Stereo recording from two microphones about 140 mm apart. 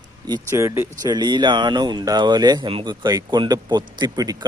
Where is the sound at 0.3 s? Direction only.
30° right (ahead or behind).